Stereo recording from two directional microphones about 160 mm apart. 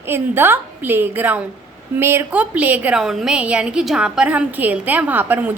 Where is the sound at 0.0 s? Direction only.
15° right (ahead or behind).